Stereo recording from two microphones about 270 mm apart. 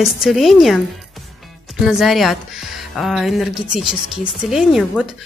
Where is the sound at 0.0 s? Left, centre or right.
Centre.